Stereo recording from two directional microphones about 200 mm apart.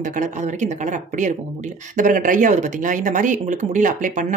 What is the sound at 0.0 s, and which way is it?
Speech, 40° right (ahead or behind).